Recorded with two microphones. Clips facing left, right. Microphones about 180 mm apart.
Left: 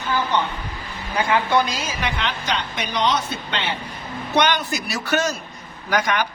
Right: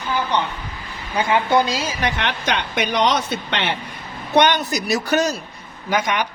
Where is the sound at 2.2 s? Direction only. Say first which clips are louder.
Right 2 dB; 60° right (ahead or behind).